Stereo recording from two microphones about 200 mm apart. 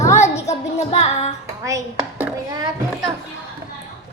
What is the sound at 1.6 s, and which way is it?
Speech, 15° right (ahead or behind).